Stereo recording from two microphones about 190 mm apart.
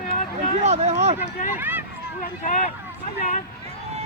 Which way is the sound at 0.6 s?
35° right (ahead or behind).